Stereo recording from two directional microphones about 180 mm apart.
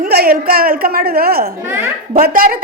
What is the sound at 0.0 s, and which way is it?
A woman's voice, 55° right (ahead or behind).